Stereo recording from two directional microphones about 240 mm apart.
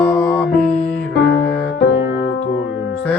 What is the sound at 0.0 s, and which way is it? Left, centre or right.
Music, centre.